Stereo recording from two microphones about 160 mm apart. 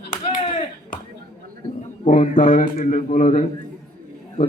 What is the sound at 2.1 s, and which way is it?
A man's voice, 50° left (ahead or behind).